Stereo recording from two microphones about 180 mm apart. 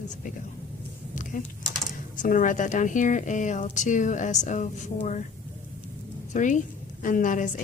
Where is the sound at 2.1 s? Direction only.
45° left (ahead or behind).